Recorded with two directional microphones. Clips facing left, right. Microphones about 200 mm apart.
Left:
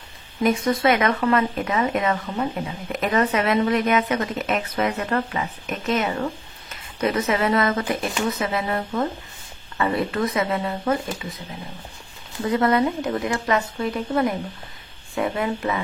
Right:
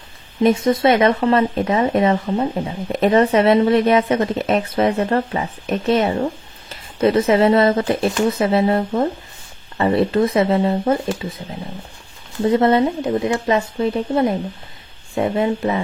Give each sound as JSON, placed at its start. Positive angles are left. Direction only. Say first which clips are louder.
{"t": 0.4, "sound": "speech", "louder": "right 5 dB", "side_deg": -25}
{"t": 12.4, "sound": "speech", "louder": "right 5 dB", "side_deg": -25}